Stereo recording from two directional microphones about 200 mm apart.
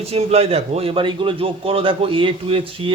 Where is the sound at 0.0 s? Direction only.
30° right (ahead or behind).